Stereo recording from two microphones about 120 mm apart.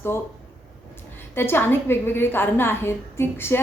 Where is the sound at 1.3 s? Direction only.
20° left (ahead or behind).